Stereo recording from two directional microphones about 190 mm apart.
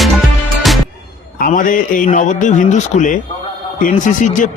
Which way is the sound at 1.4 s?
45° left (ahead or behind).